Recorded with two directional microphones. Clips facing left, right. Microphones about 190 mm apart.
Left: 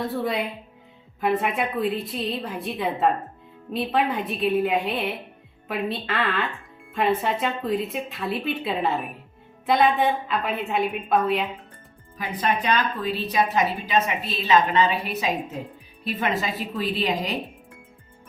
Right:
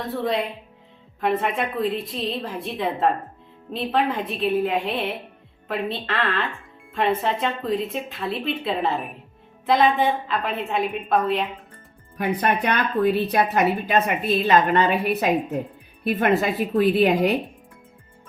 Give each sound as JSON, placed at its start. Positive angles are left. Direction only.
{"t": 0.2, "sound": "speech", "side_deg": 0}
{"t": 6.1, "sound": "speech", "side_deg": 0}
{"t": 12.1, "sound": "a woman's voice", "side_deg": -60}